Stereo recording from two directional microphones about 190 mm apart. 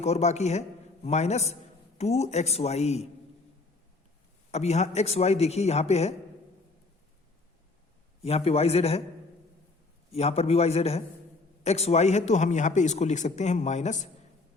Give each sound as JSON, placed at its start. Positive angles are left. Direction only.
{"t": 0.0, "sound": "a man's voice", "side_deg": 35}
{"t": 4.5, "sound": "a man's voice", "side_deg": 35}
{"t": 8.2, "sound": "a man's voice", "side_deg": 30}
{"t": 10.1, "sound": "a man's voice", "side_deg": 35}